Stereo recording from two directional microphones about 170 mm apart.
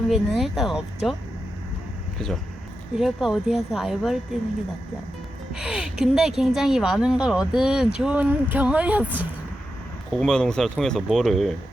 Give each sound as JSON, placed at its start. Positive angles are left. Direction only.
{"t": 0.1, "sound": "speech", "side_deg": 0}
{"t": 2.1, "sound": "speech", "side_deg": 0}
{"t": 5.5, "sound": "speech", "side_deg": -5}
{"t": 10.1, "sound": "speech", "side_deg": 5}